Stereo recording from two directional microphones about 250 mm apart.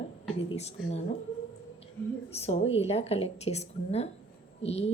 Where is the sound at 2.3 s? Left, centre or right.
Left.